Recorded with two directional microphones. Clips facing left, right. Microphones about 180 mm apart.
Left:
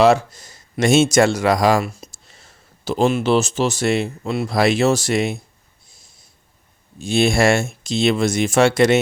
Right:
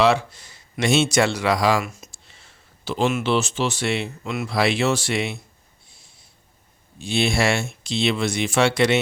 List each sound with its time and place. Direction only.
0.0 s speech: 45° left (ahead or behind)
5.9 s snort: 45° left (ahead or behind)
7.0 s speech: 45° left (ahead or behind)